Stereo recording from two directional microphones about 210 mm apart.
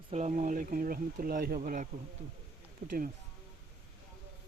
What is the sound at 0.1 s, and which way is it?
Speech, 35° right (ahead or behind).